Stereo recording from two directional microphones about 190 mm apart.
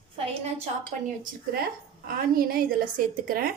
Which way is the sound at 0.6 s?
45° right (ahead or behind).